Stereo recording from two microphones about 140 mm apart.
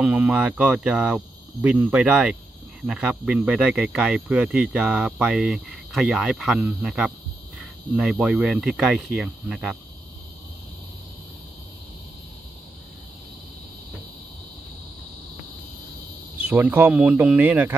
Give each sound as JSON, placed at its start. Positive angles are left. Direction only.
{"t": 0.0, "sound": "speech", "side_deg": -10}
{"t": 16.3, "sound": "speech", "side_deg": -10}